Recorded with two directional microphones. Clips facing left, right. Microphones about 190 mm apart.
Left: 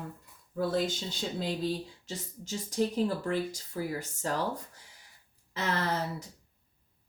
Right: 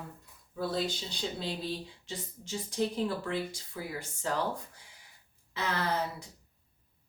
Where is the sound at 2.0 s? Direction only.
40° left (ahead or behind).